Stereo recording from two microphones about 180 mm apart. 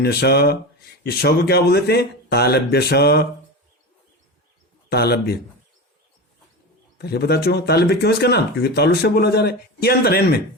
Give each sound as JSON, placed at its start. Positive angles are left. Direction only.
{"t": 0.0, "sound": "speech", "side_deg": 60}
{"t": 4.9, "sound": "speech", "side_deg": 60}
{"t": 7.0, "sound": "speech", "side_deg": 60}